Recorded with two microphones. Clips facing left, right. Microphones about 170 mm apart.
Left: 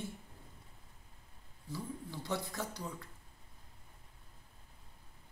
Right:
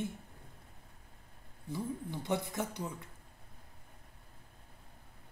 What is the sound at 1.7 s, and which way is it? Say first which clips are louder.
Speech: right 5 dB; 20° right (ahead or behind).